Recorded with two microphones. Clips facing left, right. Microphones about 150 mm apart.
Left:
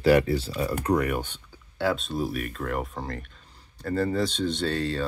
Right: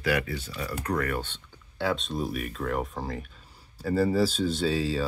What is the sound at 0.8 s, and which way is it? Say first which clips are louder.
Speech: left 3 dB; 15° left (ahead or behind).